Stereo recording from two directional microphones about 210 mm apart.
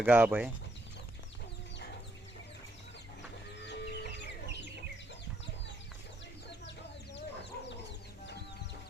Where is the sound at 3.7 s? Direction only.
55° left (ahead or behind).